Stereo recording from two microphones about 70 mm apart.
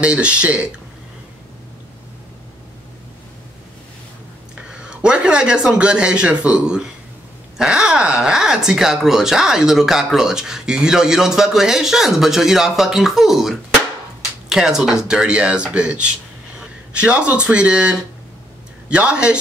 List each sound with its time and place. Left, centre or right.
0.0 s speech: centre
4.6 s speech: centre